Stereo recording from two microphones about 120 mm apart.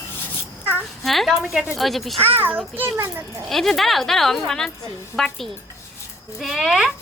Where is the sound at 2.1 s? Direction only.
55° right (ahead or behind).